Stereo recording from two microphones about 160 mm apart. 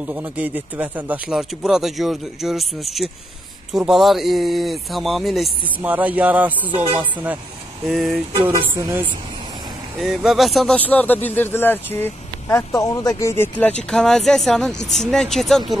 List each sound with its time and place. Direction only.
0.0 s speech: 10° right (ahead or behind)
8.5 s speech: 15° right (ahead or behind)
9.9 s speech: centre (ahead or behind)